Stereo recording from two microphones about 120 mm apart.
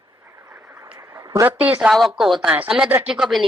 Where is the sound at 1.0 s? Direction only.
25° right (ahead or behind).